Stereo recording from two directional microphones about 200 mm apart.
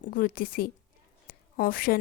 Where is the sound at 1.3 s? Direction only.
45° left (ahead or behind).